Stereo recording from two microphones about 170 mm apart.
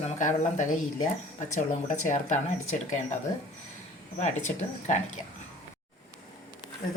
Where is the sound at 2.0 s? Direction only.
45° left (ahead or behind).